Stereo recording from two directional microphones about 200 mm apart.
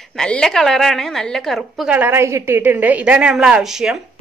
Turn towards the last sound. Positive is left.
turn(degrees=-5)  # may be behind; listen again after turning